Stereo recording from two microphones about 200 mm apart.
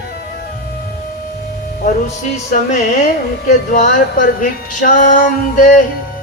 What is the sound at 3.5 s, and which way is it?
Speech, 40° left (ahead or behind).